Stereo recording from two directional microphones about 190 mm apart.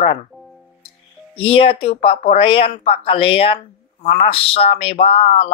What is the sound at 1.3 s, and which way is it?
Speech, 30° left (ahead or behind).